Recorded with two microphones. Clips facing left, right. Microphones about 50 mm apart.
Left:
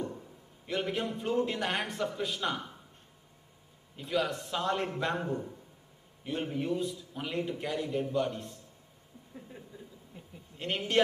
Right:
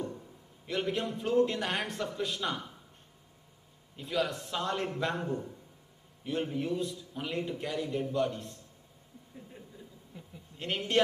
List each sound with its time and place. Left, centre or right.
0.0 s a man's voice: centre
3.9 s a man's voice: centre
6.2 s a man's voice: centre
10.1 s a sound: left
10.6 s a man's voice: centre